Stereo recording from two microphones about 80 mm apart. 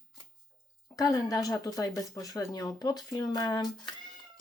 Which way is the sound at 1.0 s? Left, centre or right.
Left.